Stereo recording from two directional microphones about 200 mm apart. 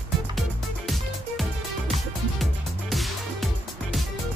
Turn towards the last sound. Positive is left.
turn(degrees=0)  # may be behind; listen again after turning